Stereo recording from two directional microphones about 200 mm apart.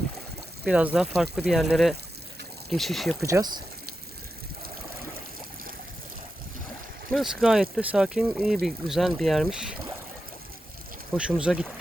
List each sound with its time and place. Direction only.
0.6 s speech: 5° right (ahead or behind)
3.2 s speech: 15° right (ahead or behind)
7.1 s speech: centre (ahead or behind)
11.3 s speech: 5° right (ahead or behind)